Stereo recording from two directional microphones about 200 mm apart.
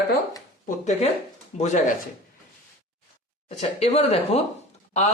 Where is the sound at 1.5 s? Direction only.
35° left (ahead or behind).